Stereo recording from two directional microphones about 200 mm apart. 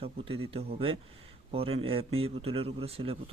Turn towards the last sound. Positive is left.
turn(degrees=-30)  # may be behind; listen again after turning